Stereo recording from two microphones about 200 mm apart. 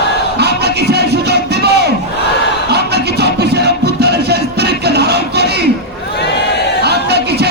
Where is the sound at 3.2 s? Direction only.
55° right (ahead or behind).